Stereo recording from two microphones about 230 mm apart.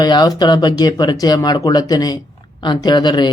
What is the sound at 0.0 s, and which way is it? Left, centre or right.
A man's voice, centre.